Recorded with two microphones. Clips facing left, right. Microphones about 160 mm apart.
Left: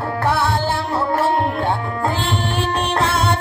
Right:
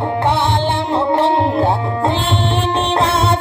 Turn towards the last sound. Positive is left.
turn(degrees=-25)  # may be behind; listen again after turning